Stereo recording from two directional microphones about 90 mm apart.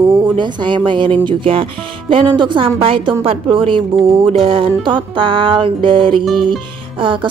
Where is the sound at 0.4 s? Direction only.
60° right (ahead or behind).